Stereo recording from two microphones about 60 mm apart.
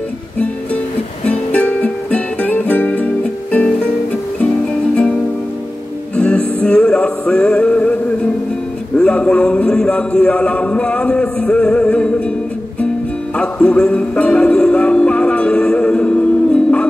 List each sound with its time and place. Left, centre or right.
1.2 s music: left
3.5 s music: centre
4.9 s music: centre
8.9 s a man's voice: centre
13.4 s music: centre